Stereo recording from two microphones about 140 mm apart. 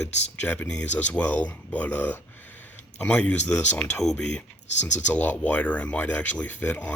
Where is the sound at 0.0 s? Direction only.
10° left (ahead or behind).